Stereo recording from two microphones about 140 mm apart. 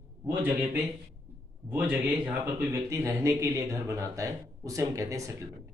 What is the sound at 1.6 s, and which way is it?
A man's voice, 10° right (ahead or behind).